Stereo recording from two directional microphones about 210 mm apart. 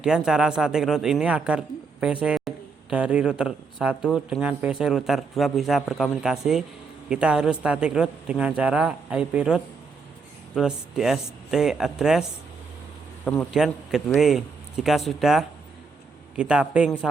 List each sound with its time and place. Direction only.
0.0 s speech: 5° right (ahead or behind)
2.2 s a sound: 5° right (ahead or behind)
2.9 s speech: 5° right (ahead or behind)
13.2 s speech: 5° left (ahead or behind)